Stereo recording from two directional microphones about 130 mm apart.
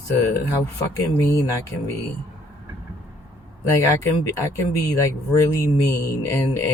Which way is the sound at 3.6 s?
25° left (ahead or behind).